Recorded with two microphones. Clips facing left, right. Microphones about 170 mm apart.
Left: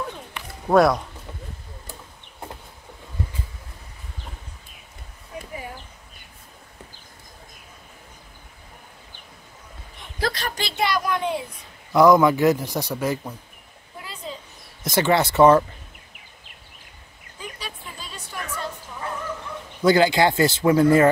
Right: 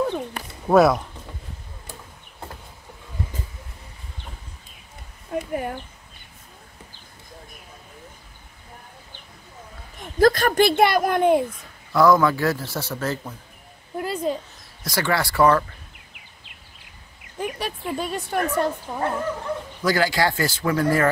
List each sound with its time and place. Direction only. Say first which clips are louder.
0.7 s speech: right 1 dB; centre (ahead or behind)
5.3 s a sound: right 9 dB; 55° right (ahead or behind)
9.9 s speech: right 10 dB; 45° right (ahead or behind)
11.9 s speech: left 2 dB; 20° left (ahead or behind)
13.9 s a sound: right 11 dB; 50° right (ahead or behind)
14.8 s speech: left 4 dB; 20° left (ahead or behind)
17.4 s speech: right 9 dB; 60° right (ahead or behind)
19.8 s speech: left 5 dB; 25° left (ahead or behind)